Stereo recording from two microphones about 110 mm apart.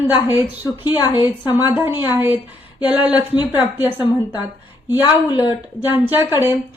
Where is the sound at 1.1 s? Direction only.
45° left (ahead or behind).